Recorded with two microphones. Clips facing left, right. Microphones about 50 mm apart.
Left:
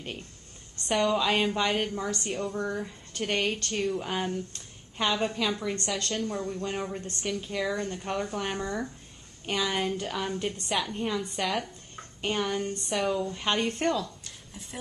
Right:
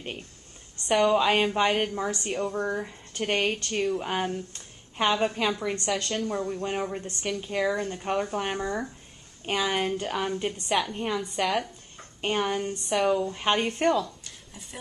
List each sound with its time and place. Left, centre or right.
0.8 s a woman's voice: centre
1.1 s speech: centre
2.1 s speech: centre
2.5 s a woman's voice: right
3.6 s speech: centre
4.0 s a woman's voice: centre
12.2 s a woman's voice: centre
12.7 s speech: centre
13.3 s speech: centre